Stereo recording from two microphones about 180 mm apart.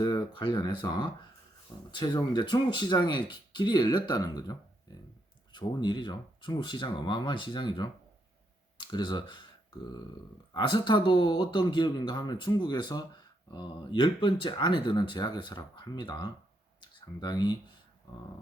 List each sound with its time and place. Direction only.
0.0 s speech: 20° left (ahead or behind)